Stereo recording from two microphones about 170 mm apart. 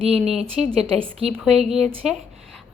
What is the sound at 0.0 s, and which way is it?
Speech, 35° right (ahead or behind).